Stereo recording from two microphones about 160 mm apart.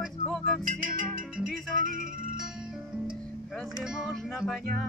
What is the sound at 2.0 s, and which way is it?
Music, 60° right (ahead or behind).